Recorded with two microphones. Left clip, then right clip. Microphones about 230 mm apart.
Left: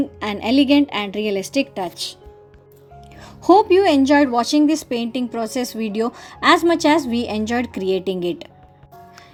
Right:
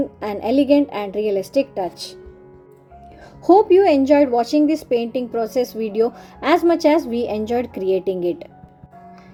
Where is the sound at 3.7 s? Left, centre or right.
Centre.